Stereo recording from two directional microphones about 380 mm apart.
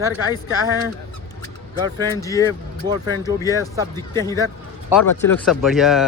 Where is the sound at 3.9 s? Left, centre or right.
Centre.